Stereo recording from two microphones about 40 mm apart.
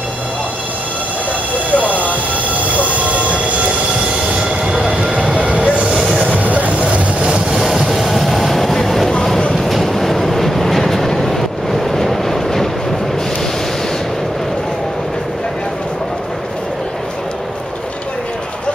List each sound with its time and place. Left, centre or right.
1.7 s train: right
4.4 s train: right
4.8 s a sound: right
5.3 s train: right
6.1 s vehicle: right
7.5 s vehicle: centre